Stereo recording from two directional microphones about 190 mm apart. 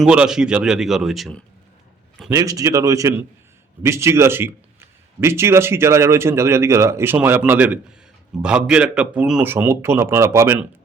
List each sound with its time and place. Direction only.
0.0 s speech: 5° right (ahead or behind)
2.3 s a man's voice: 20° right (ahead or behind)